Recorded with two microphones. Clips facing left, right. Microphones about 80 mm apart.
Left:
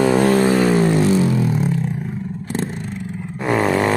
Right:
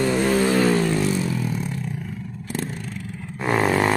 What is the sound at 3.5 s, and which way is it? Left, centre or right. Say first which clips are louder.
Wild animals: left 3 dB; centre.